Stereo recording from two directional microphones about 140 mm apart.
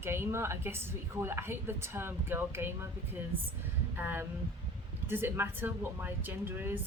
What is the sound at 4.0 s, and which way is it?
Speech, 15° right (ahead or behind).